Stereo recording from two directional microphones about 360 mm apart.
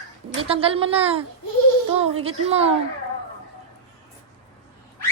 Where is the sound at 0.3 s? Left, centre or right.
Centre.